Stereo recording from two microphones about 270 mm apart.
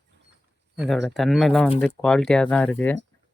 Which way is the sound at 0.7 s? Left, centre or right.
Centre.